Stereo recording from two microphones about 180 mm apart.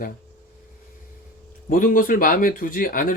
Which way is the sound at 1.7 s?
50° left (ahead or behind).